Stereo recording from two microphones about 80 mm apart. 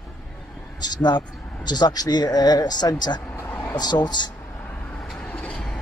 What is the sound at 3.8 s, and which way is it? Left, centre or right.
Speech, left.